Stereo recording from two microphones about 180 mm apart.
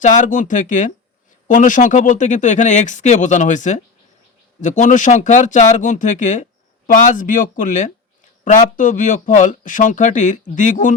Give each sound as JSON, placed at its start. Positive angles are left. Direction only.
{"t": 0.0, "sound": "speech", "side_deg": 45}